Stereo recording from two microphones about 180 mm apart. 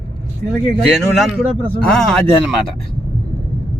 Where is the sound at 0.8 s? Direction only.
Centre (ahead or behind).